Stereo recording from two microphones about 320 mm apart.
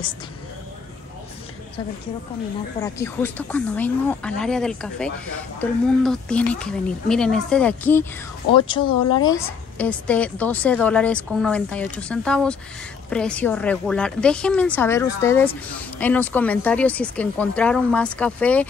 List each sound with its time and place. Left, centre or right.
2.8 s a woman's voice: centre